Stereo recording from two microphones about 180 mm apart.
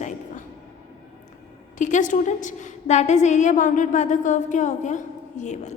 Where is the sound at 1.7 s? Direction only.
45° left (ahead or behind).